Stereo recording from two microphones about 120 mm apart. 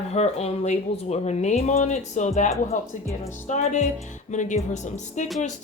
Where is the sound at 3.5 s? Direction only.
75° left (ahead or behind).